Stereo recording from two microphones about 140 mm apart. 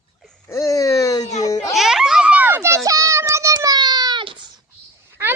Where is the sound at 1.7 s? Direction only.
Centre (ahead or behind); by 4.5 s 35° right (ahead or behind).